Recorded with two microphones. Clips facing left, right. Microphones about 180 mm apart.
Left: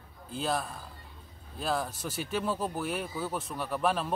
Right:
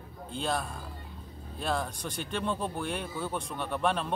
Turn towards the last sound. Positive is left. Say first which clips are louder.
# even
turn(degrees=5)  # may be behind; listen again after turning